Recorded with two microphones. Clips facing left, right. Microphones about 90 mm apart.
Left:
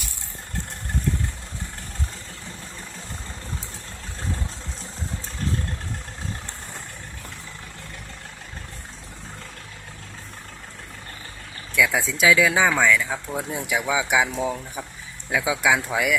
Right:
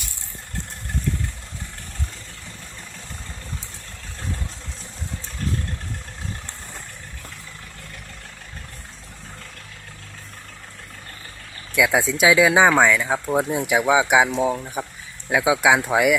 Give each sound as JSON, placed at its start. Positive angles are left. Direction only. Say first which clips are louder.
{"t": 11.9, "sound": "speech", "louder": "right 3 dB", "side_deg": -20}